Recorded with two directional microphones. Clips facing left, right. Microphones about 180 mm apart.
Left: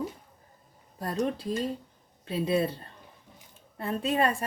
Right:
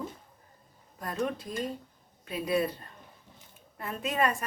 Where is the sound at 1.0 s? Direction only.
35° left (ahead or behind).